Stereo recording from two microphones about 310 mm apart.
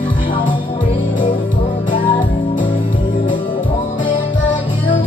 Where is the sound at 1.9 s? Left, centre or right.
Centre.